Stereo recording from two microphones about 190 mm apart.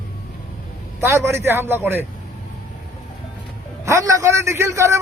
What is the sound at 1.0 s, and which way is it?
A man's voice, 15° right (ahead or behind).